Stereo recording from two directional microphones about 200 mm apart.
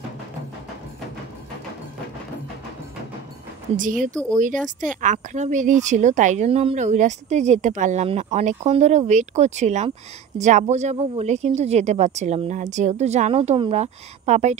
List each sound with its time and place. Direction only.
3.7 s speech: 40° right (ahead or behind)